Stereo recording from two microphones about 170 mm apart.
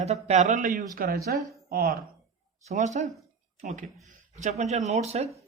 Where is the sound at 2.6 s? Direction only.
45° right (ahead or behind).